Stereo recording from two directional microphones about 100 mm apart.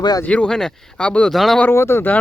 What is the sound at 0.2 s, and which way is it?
Speech, 15° left (ahead or behind).